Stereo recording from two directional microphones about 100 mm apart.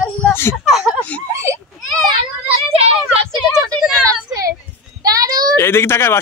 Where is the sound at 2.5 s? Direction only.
85° right.